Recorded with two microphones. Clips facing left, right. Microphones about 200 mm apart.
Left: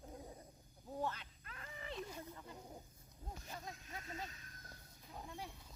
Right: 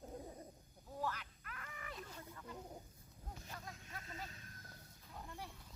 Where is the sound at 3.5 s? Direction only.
20° left (ahead or behind).